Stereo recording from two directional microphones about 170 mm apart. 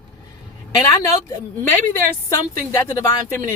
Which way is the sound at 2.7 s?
15° left (ahead or behind).